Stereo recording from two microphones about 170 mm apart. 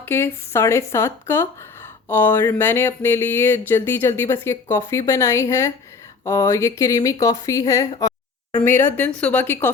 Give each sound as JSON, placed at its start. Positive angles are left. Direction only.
{"t": 0.0, "sound": "speech", "side_deg": 15}